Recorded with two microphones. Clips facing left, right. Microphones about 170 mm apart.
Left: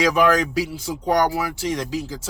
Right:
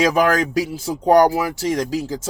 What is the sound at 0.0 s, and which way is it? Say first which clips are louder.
Speech: right 1 dB; 45° right (ahead or behind).